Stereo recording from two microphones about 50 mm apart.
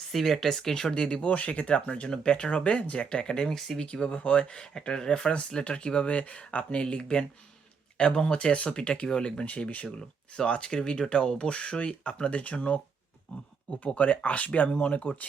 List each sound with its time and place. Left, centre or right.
0.1 s speech: centre; by 3.4 s left
3.4 s speech: centre; by 15.3 s left